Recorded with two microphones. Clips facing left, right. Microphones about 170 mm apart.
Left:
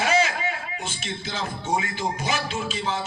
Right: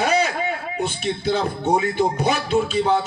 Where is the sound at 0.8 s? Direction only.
60° right (ahead or behind).